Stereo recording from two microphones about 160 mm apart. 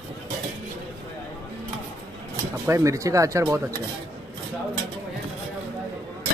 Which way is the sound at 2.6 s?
20° right (ahead or behind).